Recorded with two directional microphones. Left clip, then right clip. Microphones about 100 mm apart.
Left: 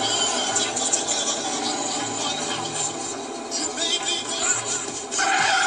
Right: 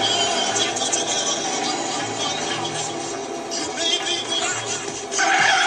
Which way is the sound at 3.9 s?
25° right (ahead or behind).